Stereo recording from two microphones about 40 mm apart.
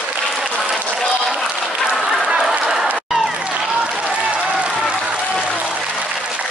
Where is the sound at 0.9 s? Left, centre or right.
Centre.